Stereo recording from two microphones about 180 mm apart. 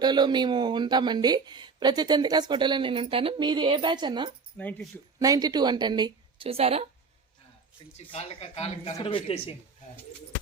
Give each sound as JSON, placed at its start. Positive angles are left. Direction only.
{"t": 0.0, "sound": "a woman's voice", "side_deg": -25}
{"t": 4.5, "sound": "speech", "side_deg": 5}
{"t": 5.2, "sound": "a woman's voice", "side_deg": -20}
{"t": 7.9, "sound": "speech", "side_deg": 35}